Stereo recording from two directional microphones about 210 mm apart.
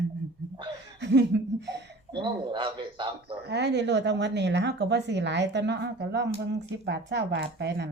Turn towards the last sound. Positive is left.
turn(degrees=-55)  # may be behind; listen again after turning